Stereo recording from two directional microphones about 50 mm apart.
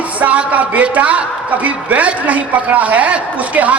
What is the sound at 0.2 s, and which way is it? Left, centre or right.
A woman's voice, right.